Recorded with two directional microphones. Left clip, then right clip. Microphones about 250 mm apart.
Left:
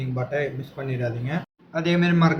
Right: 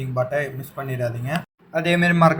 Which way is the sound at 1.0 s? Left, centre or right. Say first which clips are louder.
Right 4 dB; right.